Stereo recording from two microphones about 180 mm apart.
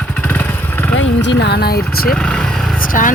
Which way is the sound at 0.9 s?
85° left.